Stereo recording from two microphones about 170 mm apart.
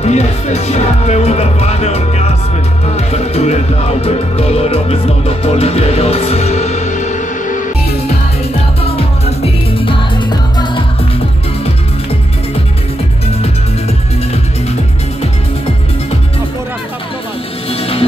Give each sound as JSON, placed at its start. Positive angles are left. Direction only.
{"t": 0.0, "sound": "music", "side_deg": 40}
{"t": 8.8, "sound": "music", "side_deg": 35}
{"t": 17.6, "sound": "music", "side_deg": 35}